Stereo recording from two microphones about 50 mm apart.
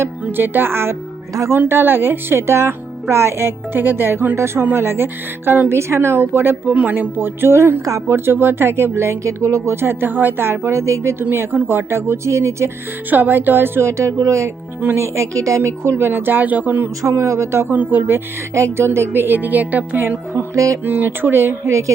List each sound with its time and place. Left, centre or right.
0.3 s speech: right
4.4 s a woman's voice: right
6.7 s speech: right
8.1 s a woman's voice: right
9.8 s a woman's voice: right
13.1 s a woman's voice: right
17.0 s speech: right
17.7 s music: right
18.5 s speech: right
18.9 s music: right
20.3 s music: right
20.8 s speech: right
21.7 s music: right